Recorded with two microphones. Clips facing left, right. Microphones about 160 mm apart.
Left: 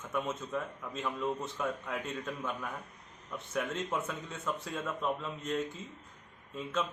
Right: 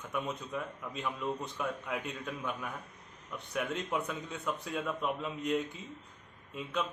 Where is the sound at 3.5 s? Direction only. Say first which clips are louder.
Even; centre (ahead or behind).